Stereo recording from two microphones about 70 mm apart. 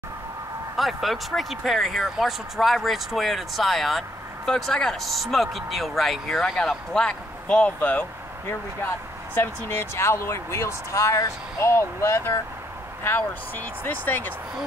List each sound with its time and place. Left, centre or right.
0.7 s speech: centre
8.0 s speech: left